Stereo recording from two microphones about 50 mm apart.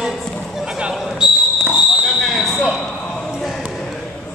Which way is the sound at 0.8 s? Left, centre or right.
Centre.